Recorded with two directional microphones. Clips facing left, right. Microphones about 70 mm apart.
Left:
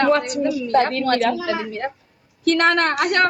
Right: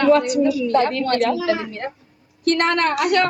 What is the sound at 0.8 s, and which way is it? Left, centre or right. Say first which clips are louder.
Speech: left 4 dB; left.